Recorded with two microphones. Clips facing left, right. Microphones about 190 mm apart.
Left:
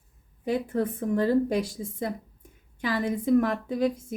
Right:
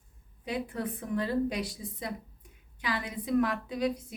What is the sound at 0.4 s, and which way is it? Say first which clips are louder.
A woman's voice: left 7 dB; 45° left (ahead or behind).